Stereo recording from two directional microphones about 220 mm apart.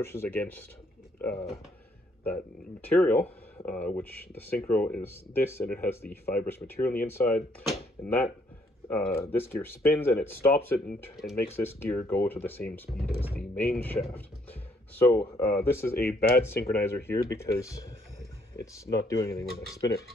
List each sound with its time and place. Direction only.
0.0 s speech: 10° left (ahead or behind)
2.9 s speech: 5° left (ahead or behind)
11.0 s speech: centre (ahead or behind)
11.3 s speech: 10° left (ahead or behind)
13.7 s speech: 5° left (ahead or behind)
16.1 s speech: 45° left (ahead or behind)
16.4 s speech: 10° left (ahead or behind)
18.9 s speech: 15° left (ahead or behind)